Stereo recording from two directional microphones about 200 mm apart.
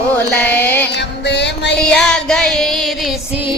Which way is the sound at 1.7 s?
5° left (ahead or behind).